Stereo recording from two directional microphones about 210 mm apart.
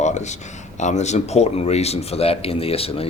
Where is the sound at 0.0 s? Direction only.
35° left (ahead or behind).